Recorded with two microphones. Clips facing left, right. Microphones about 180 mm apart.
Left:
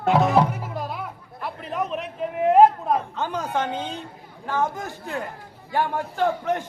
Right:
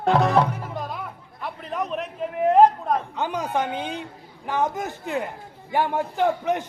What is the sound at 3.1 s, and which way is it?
Speech, 15° right (ahead or behind).